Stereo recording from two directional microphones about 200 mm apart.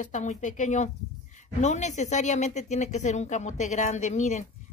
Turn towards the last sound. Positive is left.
turn(degrees=35)  # may be behind; listen again after turning